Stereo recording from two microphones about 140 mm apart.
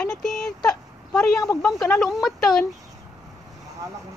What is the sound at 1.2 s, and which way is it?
Speech, 20° left (ahead or behind).